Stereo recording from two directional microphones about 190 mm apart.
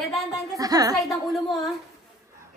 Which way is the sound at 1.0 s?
Centre (ahead or behind).